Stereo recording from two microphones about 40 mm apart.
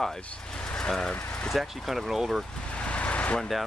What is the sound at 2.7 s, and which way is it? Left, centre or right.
Vehicle, left.